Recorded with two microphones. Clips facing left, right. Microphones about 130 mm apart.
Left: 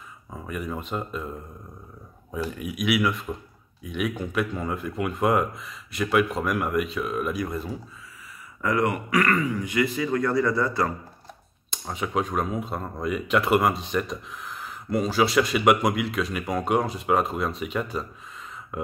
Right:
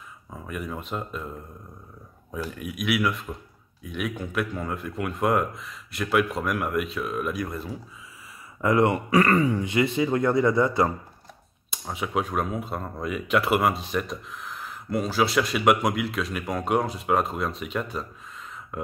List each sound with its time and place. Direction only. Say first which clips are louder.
0.3 s speech: left 2 dB; centre (ahead or behind)
2.3 s speech: left 2 dB; centre (ahead or behind)
8.5 s speech: right 3 dB; 25° right (ahead or behind)
11.7 s speech: even; 5° right (ahead or behind)